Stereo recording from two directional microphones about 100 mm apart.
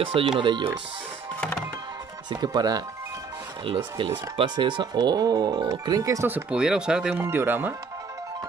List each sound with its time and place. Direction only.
0.0 s speech: 60° right (ahead or behind)
2.2 s speech: 40° right (ahead or behind)
3.6 s speech: 60° right (ahead or behind); by 6.2 s 35° right (ahead or behind)
6.2 s speech: 15° right (ahead or behind)
6.6 s speech: 5° right (ahead or behind)
7.2 s speech: 20° right (ahead or behind)